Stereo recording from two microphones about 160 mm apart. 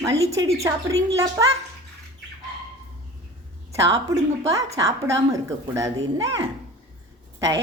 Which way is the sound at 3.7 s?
20° right (ahead or behind).